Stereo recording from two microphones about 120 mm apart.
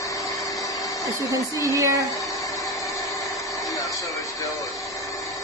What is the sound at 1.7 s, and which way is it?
Speech, 25° right (ahead or behind).